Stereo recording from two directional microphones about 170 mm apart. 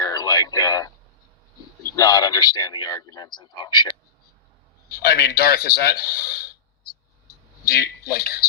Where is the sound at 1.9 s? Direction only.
20° left (ahead or behind).